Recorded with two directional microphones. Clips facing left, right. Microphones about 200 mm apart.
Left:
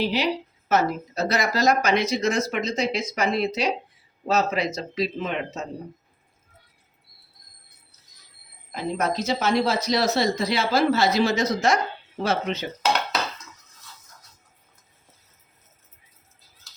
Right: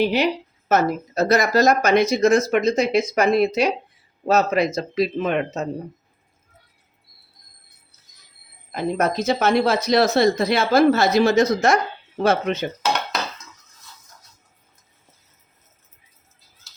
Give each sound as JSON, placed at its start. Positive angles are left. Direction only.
{"t": 0.0, "sound": "speech", "side_deg": -55}
{"t": 8.7, "sound": "speech", "side_deg": -55}